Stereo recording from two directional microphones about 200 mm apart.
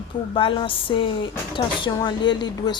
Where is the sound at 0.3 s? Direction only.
25° left (ahead or behind).